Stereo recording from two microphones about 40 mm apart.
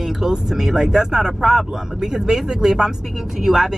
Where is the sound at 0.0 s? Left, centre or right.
Centre.